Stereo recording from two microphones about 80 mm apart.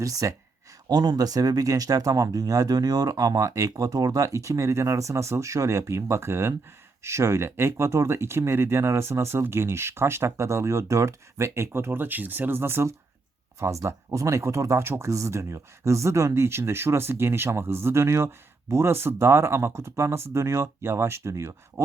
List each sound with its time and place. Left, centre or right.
0.0 s speech: right
0.9 s speech: right